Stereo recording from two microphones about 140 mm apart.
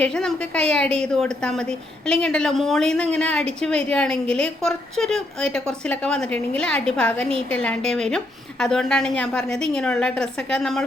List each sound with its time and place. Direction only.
0.0 s a woman's voice: 5° left (ahead or behind)